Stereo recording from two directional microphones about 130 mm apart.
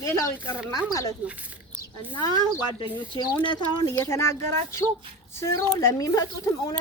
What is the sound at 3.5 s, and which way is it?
Speech, 30° left (ahead or behind).